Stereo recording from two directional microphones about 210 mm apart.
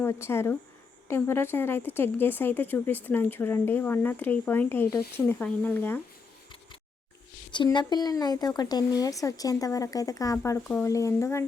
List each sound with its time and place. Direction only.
0.0 s a woman's voice: 10° left (ahead or behind)
7.5 s a woman's voice: 20° left (ahead or behind)